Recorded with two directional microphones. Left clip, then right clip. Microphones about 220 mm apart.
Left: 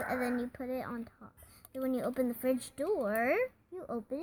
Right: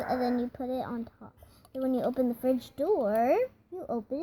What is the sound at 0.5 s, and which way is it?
Speech, 20° left (ahead or behind).